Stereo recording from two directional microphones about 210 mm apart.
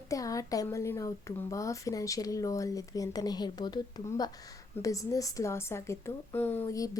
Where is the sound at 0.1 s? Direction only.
15° left (ahead or behind).